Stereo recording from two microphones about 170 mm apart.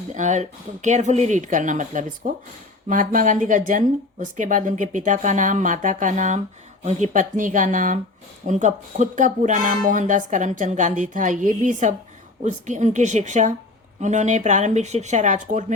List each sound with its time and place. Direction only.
0.1 s speech: 45° right (ahead or behind)